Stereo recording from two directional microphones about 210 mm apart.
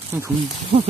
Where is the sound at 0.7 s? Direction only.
30° right (ahead or behind).